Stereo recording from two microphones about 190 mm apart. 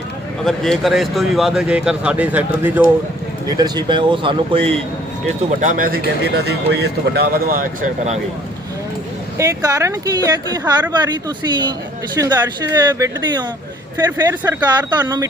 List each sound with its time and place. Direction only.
0.4 s speech: centre (ahead or behind)
3.6 s speech: 25° right (ahead or behind)
5.5 s speech: 45° right (ahead or behind)
9.4 s speech: 20° right (ahead or behind)
14.4 s speech: 20° right (ahead or behind)